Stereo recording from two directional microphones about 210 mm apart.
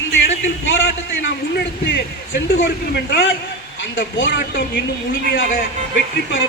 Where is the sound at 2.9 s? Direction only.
50° left (ahead or behind).